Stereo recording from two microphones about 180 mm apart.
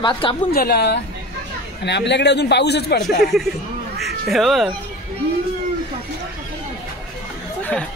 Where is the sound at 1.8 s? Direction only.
75° left (ahead or behind).